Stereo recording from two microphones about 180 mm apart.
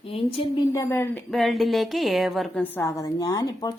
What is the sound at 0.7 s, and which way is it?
Speech, 15° left (ahead or behind).